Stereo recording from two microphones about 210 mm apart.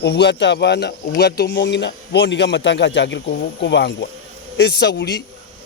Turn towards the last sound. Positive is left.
turn(degrees=55)  # may be behind; listen again after turning